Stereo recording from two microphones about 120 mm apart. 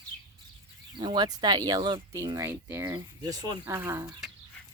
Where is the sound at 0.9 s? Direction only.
40° right (ahead or behind); by 4.1 s 20° right (ahead or behind).